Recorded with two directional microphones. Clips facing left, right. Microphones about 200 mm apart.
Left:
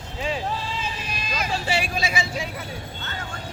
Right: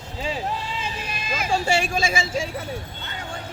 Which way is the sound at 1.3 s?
50° right (ahead or behind).